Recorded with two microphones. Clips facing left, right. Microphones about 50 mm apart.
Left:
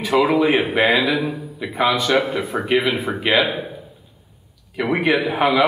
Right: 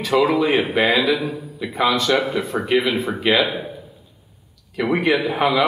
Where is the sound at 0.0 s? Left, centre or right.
Centre.